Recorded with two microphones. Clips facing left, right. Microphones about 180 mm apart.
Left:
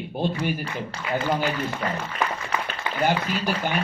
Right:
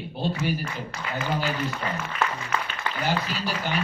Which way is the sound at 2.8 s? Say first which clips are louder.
Even; 20° left (ahead or behind).